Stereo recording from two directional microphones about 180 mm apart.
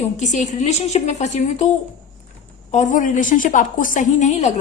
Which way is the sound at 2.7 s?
45° left (ahead or behind).